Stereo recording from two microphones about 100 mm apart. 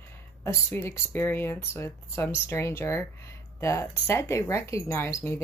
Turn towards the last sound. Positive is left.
turn(degrees=25)  # may be behind; listen again after turning